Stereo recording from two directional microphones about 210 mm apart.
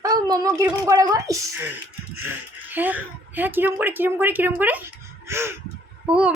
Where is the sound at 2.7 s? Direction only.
10° right (ahead or behind).